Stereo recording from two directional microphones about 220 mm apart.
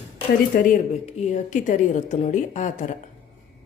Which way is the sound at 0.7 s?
30° left (ahead or behind).